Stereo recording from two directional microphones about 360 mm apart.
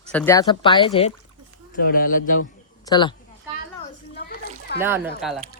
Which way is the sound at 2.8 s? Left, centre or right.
Centre.